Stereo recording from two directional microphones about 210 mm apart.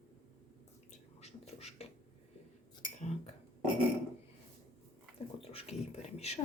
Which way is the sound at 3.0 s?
30° left (ahead or behind).